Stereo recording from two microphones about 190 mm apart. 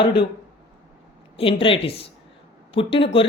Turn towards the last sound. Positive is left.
turn(degrees=30)  # may be behind; listen again after turning